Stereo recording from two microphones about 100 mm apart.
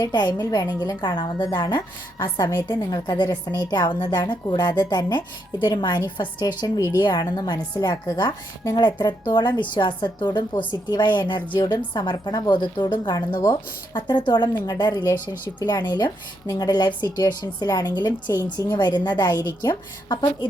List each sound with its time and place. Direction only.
0.0 s a woman's voice: 45° left (ahead or behind)